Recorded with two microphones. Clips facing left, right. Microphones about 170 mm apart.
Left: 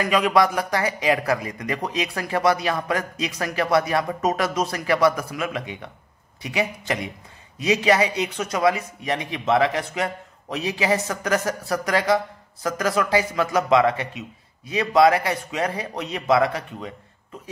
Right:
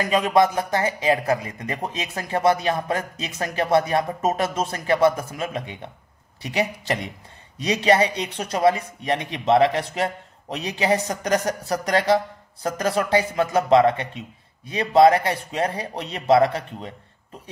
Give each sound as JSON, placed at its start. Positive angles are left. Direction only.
{"t": 0.0, "sound": "speech", "side_deg": -20}
{"t": 7.6, "sound": "a man's voice", "side_deg": -35}